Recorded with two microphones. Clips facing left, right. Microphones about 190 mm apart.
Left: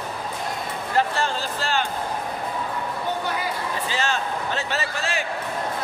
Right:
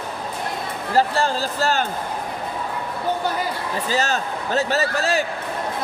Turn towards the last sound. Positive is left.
turn(degrees=-40)  # may be behind; listen again after turning